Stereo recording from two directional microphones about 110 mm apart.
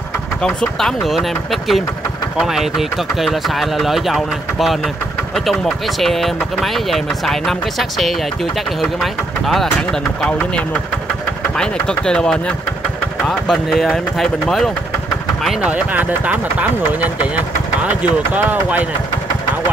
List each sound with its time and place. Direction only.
0.4 s speech: 5° left (ahead or behind)
9.0 s speech: centre (ahead or behind)
15.6 s speech: 15° right (ahead or behind)
18.3 s speech: 15° right (ahead or behind)